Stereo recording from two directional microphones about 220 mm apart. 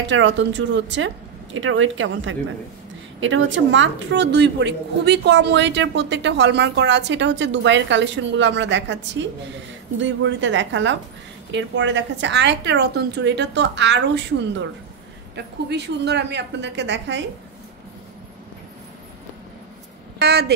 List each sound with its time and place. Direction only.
0.0 s a woman's voice: 55° right (ahead or behind)
20.2 s speech: 45° right (ahead or behind)